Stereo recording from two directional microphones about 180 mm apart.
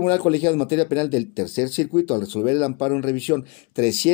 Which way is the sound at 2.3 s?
35° right (ahead or behind).